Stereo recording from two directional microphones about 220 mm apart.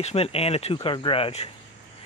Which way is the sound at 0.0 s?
25° left (ahead or behind).